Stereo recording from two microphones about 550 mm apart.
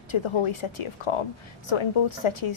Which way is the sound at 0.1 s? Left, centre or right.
Left.